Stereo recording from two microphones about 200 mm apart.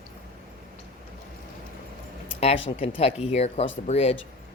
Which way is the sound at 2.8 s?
30° left (ahead or behind).